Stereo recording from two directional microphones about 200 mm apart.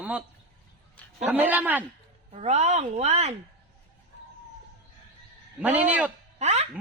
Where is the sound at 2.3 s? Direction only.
35° right (ahead or behind).